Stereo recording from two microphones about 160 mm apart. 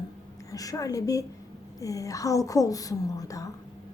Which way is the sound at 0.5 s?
20° left (ahead or behind).